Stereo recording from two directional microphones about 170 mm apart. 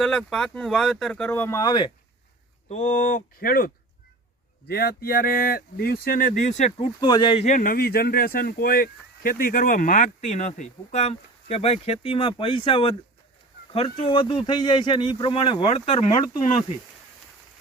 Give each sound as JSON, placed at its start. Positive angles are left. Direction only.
{"t": 0.0, "sound": "speech", "side_deg": 5}
{"t": 2.6, "sound": "speech", "side_deg": 45}
{"t": 4.7, "sound": "speech", "side_deg": 65}
{"t": 7.0, "sound": "speech", "side_deg": 25}
{"t": 7.4, "sound": "speech", "side_deg": 50}